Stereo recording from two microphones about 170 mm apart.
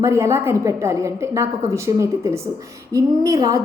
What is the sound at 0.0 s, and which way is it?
A woman's voice, 15° right (ahead or behind).